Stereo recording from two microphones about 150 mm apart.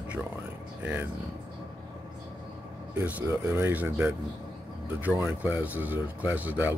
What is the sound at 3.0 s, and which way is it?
Speech, 15° right (ahead or behind).